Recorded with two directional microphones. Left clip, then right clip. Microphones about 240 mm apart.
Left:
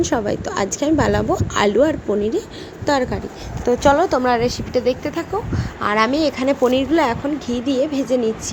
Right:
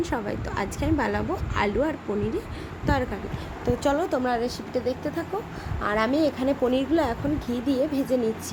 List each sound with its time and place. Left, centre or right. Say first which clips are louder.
0.0 s a woman's voice: left 9 dB; centre